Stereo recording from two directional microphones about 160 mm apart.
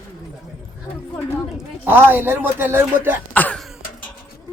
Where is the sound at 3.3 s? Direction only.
10° left (ahead or behind).